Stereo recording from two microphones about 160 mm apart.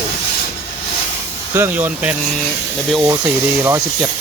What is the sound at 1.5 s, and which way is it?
Speech, 15° right (ahead or behind).